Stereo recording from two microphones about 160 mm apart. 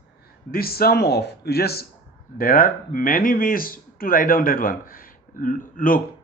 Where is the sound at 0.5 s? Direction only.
70° left (ahead or behind).